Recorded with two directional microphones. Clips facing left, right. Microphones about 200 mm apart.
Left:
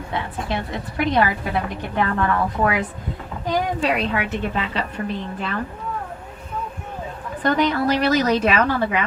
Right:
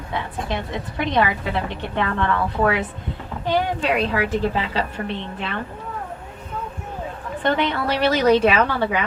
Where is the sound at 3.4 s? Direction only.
30° right (ahead or behind).